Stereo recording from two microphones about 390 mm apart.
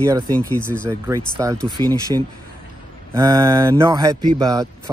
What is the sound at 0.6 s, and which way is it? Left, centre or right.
Speech, centre.